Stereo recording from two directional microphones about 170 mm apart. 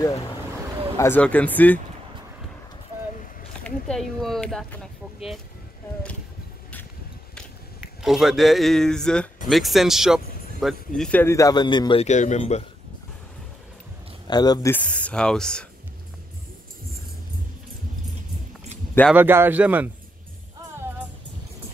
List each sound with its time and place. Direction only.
0.9 s speech: 10° left (ahead or behind)
3.6 s speech: 5° left (ahead or behind)
7.8 s speech: centre (ahead or behind); by 12.1 s 30° left (ahead or behind)
12.1 s speech: 45° left (ahead or behind)
14.2 s speech: 25° left (ahead or behind)
14.7 s speech: 10° left (ahead or behind)
19.1 s a man's voice: 10° right (ahead or behind)